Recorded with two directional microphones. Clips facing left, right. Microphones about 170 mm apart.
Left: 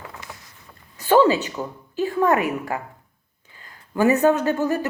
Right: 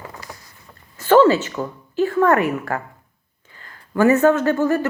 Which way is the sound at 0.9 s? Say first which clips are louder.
Right 3 dB; 15° left (ahead or behind).